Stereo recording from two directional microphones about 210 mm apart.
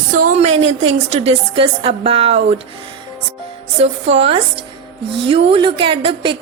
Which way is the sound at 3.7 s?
30° right (ahead or behind).